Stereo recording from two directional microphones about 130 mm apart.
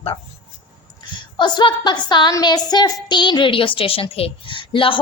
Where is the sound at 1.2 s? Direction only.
35° left (ahead or behind).